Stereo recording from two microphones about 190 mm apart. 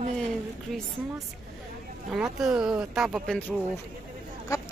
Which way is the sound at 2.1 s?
Centre (ahead or behind).